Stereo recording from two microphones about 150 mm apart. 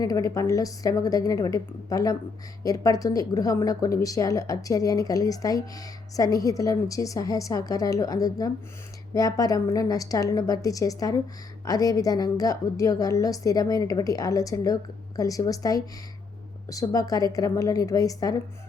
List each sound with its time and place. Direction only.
0.0 s speech: 25° left (ahead or behind)